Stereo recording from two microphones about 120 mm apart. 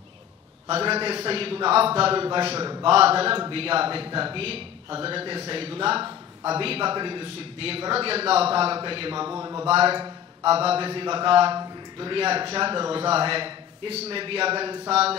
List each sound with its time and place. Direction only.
0.7 s speech: 55° right (ahead or behind)
2.6 s a man's voice: 40° right (ahead or behind)
2.9 s speech: 55° right (ahead or behind)
9.4 s speech: 30° right (ahead or behind)
9.7 s speech: 55° right (ahead or behind)
9.9 s a sound: 40° right (ahead or behind)
10.5 s a man's voice: 55° right (ahead or behind)